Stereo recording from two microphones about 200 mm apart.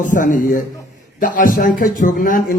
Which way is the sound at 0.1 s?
40° left (ahead or behind).